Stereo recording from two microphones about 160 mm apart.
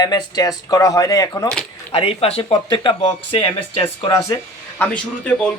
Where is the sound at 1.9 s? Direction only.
35° left (ahead or behind).